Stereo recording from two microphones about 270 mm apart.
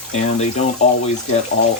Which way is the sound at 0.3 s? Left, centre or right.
Left.